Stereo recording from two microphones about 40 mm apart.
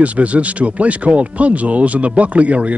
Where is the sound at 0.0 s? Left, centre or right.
Right.